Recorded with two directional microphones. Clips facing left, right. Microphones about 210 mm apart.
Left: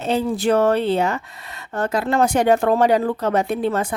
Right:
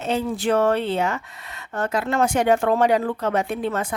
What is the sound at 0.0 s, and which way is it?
Speech, 35° left (ahead or behind).